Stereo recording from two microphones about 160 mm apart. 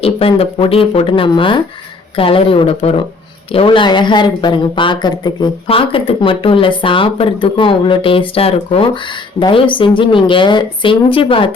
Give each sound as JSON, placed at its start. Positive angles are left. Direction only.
{"t": 0.0, "sound": "speech", "side_deg": 35}